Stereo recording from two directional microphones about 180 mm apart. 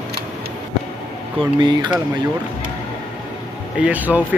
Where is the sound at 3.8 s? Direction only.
10° right (ahead or behind).